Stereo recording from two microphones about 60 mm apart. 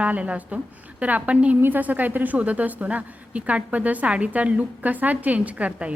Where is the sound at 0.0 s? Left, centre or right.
Right.